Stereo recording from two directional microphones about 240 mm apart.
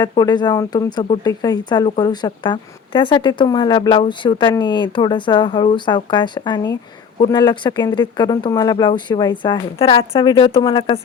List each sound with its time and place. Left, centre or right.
0.0 s speech: centre